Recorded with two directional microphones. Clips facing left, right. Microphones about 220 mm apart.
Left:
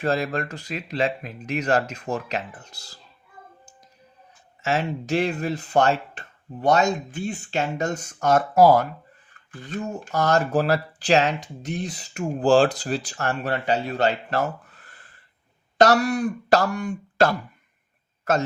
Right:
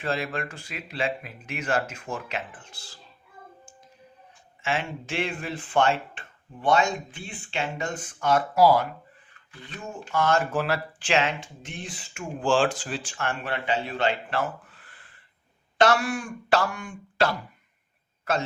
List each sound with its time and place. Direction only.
0.0 s speech: 40° left (ahead or behind)
4.6 s speech: 40° left (ahead or behind)